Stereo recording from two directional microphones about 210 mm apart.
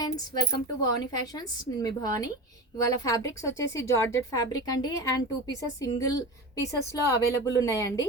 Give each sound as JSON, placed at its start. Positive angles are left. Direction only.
{"t": 0.0, "sound": "a woman's voice", "side_deg": 15}